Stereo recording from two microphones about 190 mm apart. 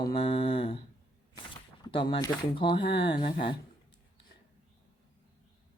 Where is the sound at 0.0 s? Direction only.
30° left (ahead or behind).